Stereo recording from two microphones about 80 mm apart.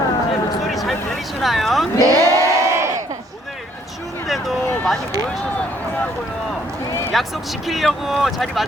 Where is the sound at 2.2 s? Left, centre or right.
Right.